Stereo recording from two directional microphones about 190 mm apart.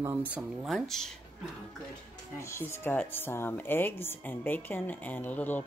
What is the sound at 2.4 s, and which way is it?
Speech, 15° left (ahead or behind).